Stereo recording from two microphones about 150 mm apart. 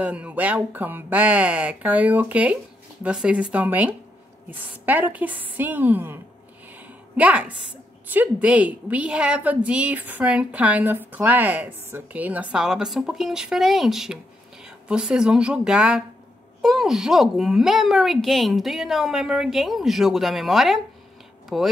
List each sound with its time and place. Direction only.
0.0 s a woman's voice: 10° right (ahead or behind)
6.7 s a sound: 10° right (ahead or behind)
8.1 s a woman's voice: 10° right (ahead or behind)